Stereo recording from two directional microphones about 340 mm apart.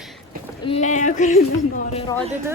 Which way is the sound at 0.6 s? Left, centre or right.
Centre.